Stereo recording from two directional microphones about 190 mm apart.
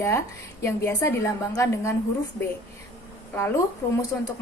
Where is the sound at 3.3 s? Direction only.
15° left (ahead or behind).